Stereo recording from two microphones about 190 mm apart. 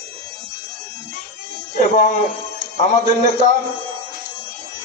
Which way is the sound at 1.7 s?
40° left (ahead or behind).